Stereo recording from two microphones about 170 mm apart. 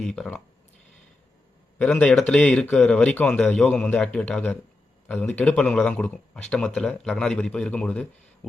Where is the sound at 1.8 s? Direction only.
5° left (ahead or behind).